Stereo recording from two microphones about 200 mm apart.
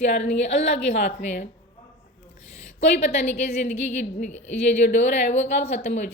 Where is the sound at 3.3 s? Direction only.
35° left (ahead or behind).